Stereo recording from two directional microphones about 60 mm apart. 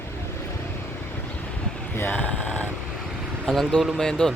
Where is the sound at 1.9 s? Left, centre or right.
Left.